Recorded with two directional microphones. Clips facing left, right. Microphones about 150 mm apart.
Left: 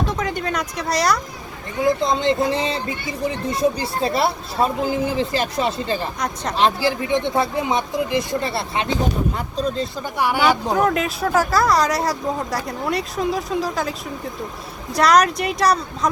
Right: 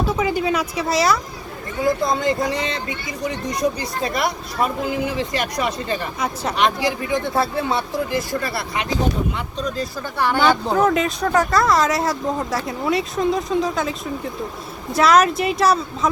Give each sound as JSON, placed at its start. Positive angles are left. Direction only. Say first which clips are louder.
{"t": 0.0, "sound": "speech", "louder": "right 3 dB", "side_deg": -5}
{"t": 1.8, "sound": "speech", "louder": "left 1 dB", "side_deg": 20}
{"t": 6.1, "sound": "speech", "louder": "right 1 dB", "side_deg": -5}
{"t": 6.6, "sound": "speech", "louder": "left 2 dB", "side_deg": 30}
{"t": 10.2, "sound": "speech", "louder": "right 1 dB", "side_deg": 10}
{"t": 14.9, "sound": "speech", "louder": "right 1 dB", "side_deg": 0}